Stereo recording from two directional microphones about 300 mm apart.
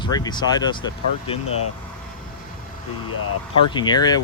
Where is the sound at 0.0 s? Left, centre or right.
Centre.